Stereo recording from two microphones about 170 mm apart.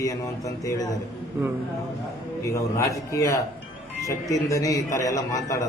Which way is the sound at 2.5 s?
20° left (ahead or behind).